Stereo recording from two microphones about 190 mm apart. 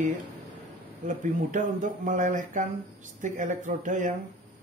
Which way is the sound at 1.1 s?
40° right (ahead or behind).